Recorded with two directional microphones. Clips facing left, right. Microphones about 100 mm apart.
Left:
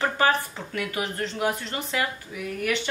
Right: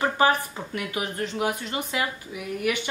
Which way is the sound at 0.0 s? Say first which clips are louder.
Right 1 dB; 15° right (ahead or behind).